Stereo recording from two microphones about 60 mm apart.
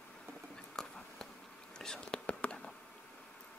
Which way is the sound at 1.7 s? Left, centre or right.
Centre.